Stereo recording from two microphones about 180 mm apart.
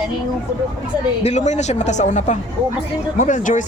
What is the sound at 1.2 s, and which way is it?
Speech, 40° left (ahead or behind).